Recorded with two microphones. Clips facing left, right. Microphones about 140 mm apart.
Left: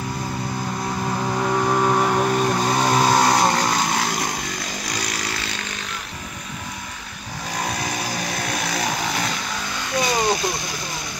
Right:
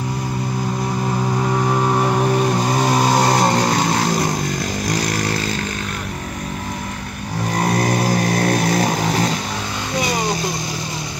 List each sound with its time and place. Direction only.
1.3 s vehicle: 5° right (ahead or behind)
3.4 s vehicle: 25° right (ahead or behind)
4.8 s vehicle: 50° right (ahead or behind)
7.5 s vehicle: 50° right (ahead or behind); by 9.3 s 35° right (ahead or behind)